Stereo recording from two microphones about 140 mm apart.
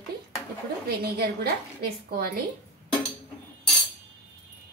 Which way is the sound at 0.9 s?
90° right.